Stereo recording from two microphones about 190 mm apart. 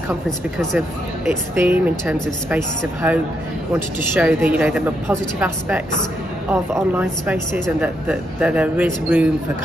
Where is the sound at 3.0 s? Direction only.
10° right (ahead or behind).